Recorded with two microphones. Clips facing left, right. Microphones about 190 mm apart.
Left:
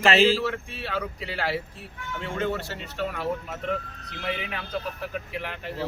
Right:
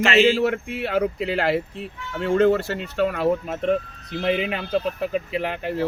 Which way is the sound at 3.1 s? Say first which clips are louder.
Right 8 dB; 85° right.